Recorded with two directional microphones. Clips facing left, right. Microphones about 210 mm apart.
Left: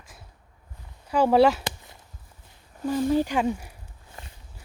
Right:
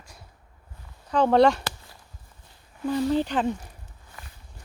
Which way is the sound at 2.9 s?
10° left (ahead or behind).